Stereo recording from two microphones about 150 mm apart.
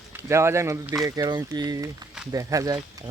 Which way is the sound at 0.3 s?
20° right (ahead or behind).